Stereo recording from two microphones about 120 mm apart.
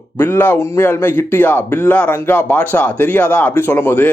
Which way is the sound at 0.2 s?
20° left (ahead or behind).